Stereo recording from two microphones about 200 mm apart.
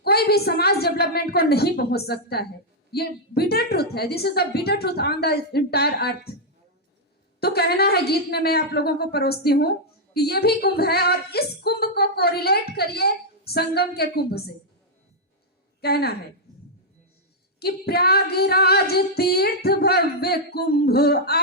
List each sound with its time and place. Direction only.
0.0 s a woman's voice: 55° left (ahead or behind)
7.3 s a woman's voice: 50° left (ahead or behind)
15.8 s a woman's voice: 50° left (ahead or behind)
17.6 s a woman's voice: 50° left (ahead or behind)